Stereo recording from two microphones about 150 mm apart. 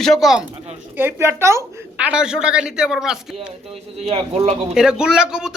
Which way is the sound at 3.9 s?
45° right (ahead or behind).